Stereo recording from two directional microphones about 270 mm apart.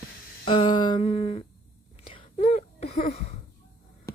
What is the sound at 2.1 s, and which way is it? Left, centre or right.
Whispering, centre.